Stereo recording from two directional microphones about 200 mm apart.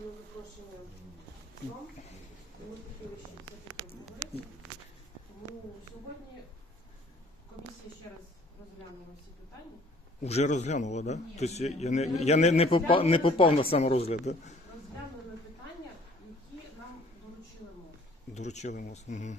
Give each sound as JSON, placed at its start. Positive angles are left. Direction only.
{"t": 10.2, "sound": "a man's voice", "side_deg": 35}
{"t": 18.3, "sound": "a man's voice", "side_deg": 35}